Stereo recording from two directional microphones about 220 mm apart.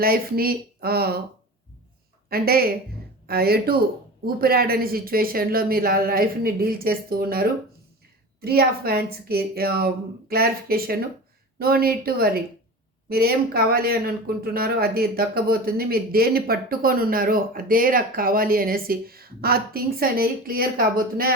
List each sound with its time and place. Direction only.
0.0 s speech: 45° right (ahead or behind)
2.3 s speech: 45° right (ahead or behind)